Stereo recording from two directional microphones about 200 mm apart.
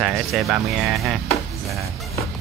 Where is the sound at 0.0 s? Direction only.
Centre (ahead or behind).